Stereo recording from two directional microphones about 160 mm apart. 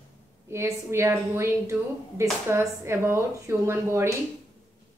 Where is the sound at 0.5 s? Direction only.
15° right (ahead or behind).